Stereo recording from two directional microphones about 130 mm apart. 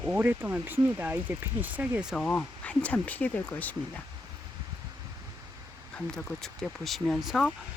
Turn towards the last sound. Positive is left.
turn(degrees=0)  # may be behind; listen again after turning